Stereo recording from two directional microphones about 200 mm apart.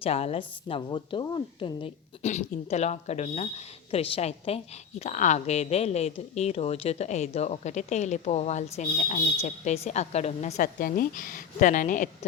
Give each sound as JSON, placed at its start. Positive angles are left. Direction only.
{"t": 0.0, "sound": "a woman's voice", "side_deg": 30}